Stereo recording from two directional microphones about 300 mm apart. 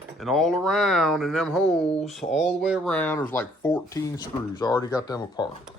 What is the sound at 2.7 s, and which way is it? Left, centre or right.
Speech, centre.